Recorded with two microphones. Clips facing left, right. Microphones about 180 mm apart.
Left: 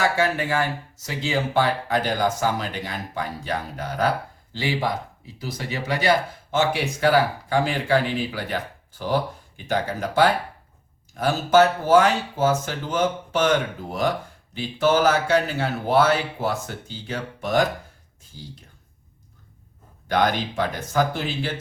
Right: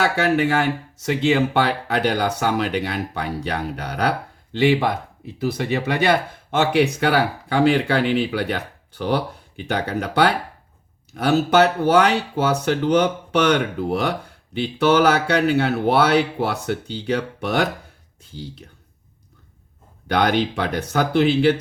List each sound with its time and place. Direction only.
0.0 s speech: 65° right (ahead or behind)
20.1 s speech: 70° right (ahead or behind)